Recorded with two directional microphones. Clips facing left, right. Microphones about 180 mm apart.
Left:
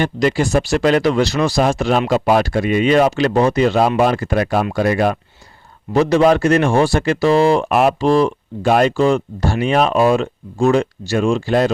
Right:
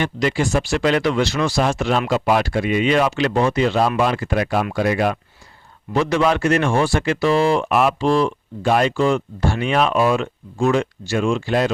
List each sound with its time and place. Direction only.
0.0 s speech: 40° left (ahead or behind)